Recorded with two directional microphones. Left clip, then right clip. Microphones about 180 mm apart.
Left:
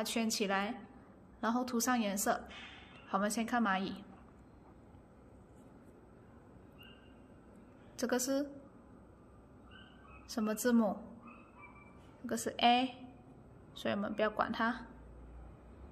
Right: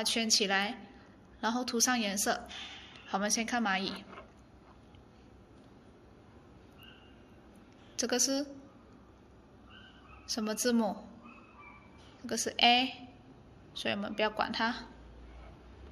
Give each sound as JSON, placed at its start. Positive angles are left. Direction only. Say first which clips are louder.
{"t": 0.0, "sound": "speech", "louder": "right 6 dB", "side_deg": 25}
{"t": 8.0, "sound": "speech", "louder": "right 3 dB", "side_deg": 25}
{"t": 10.3, "sound": "speech", "louder": "right 2 dB", "side_deg": 30}
{"t": 12.3, "sound": "speech", "louder": "right 4 dB", "side_deg": 25}